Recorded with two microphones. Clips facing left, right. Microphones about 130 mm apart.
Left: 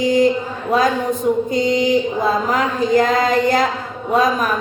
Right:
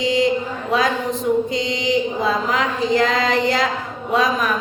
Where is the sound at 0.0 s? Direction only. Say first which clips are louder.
Left 4 dB; 45° left (ahead or behind).